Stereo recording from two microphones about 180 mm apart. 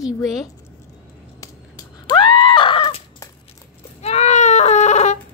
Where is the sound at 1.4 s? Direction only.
20° left (ahead or behind).